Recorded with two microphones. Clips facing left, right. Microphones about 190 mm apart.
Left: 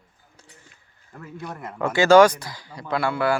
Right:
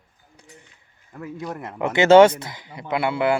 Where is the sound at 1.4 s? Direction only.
20° right (ahead or behind).